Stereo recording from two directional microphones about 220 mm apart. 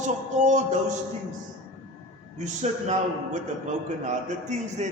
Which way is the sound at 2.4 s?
35° right (ahead or behind).